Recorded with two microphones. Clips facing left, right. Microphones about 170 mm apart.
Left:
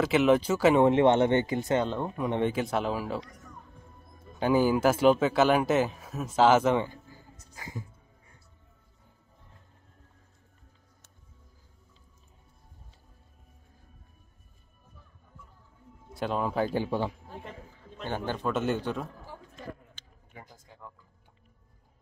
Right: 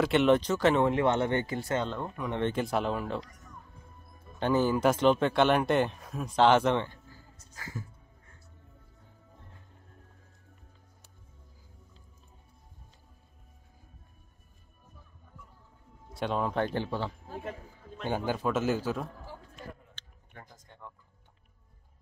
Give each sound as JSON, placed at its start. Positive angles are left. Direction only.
{"t": 0.0, "sound": "speech", "side_deg": 5}
{"t": 0.8, "sound": "speech", "side_deg": 20}
{"t": 2.5, "sound": "speech", "side_deg": 0}
{"t": 4.4, "sound": "speech", "side_deg": 10}
{"t": 7.5, "sound": "music", "side_deg": 20}
{"t": 16.1, "sound": "speech", "side_deg": 0}
{"t": 18.0, "sound": "speech", "side_deg": -10}
{"t": 20.0, "sound": "a sound", "side_deg": 10}